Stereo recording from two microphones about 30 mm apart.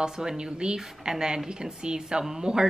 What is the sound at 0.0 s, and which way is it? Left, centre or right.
A woman's voice, right.